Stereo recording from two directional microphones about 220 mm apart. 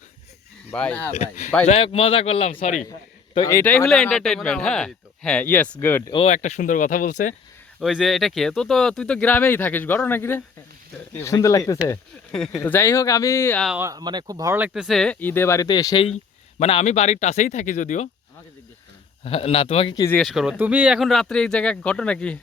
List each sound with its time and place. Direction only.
0.7 s speech: 5° left (ahead or behind)
1.1 s speech: 30° left (ahead or behind)
3.3 s speech: 15° left (ahead or behind)
6.1 s speech: 30° left (ahead or behind)
7.8 s speech: centre (ahead or behind)
12.3 s speech: centre (ahead or behind)
13.7 s speech: 15° right (ahead or behind); by 18.1 s 35° left (ahead or behind)
19.2 s speech: 25° left (ahead or behind)
20.1 s speech: centre (ahead or behind)